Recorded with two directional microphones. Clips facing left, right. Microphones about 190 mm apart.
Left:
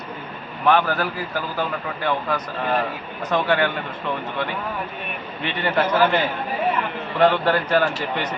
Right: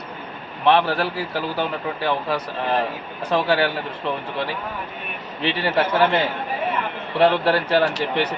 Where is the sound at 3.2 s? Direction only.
30° right (ahead or behind).